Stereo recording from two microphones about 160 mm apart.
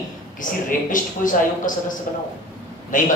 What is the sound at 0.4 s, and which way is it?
A man's voice, 55° left (ahead or behind).